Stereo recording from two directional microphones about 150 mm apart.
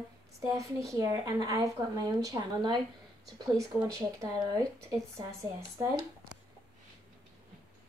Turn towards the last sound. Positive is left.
turn(degrees=-20)  # may be behind; listen again after turning